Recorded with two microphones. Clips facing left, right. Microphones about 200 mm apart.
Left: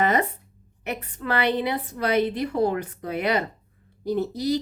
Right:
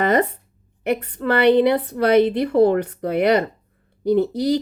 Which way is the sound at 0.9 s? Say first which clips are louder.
Right 5 dB; 60° right (ahead or behind).